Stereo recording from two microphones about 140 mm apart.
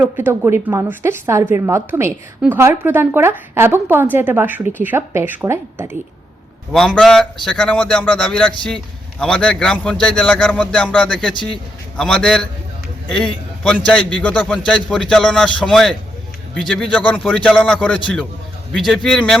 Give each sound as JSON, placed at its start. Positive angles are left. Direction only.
{"t": 0.0, "sound": "a woman's voice", "side_deg": -15}
{"t": 6.7, "sound": "a man's voice", "side_deg": 5}
{"t": 13.8, "sound": "a man's voice", "side_deg": 10}